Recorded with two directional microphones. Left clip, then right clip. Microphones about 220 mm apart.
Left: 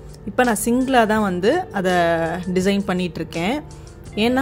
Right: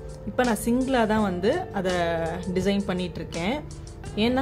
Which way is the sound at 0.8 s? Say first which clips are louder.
Left 7 dB; 30° left (ahead or behind).